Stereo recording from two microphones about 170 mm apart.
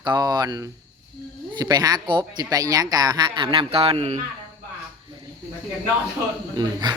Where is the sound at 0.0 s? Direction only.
25° right (ahead or behind).